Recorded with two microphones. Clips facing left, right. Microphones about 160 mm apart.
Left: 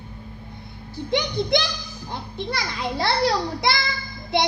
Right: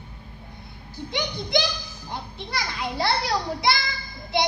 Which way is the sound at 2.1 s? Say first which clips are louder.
Left 3 dB; 55° left (ahead or behind).